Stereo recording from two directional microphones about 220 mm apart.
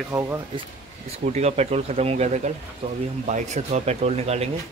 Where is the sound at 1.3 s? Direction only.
30° right (ahead or behind).